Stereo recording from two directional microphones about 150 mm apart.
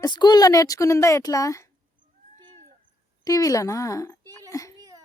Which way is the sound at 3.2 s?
25° left (ahead or behind).